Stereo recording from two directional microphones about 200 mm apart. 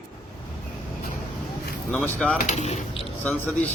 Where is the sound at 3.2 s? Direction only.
5° left (ahead or behind).